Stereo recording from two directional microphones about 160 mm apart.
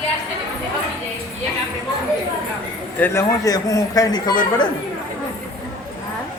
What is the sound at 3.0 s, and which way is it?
A man's voice, 15° left (ahead or behind).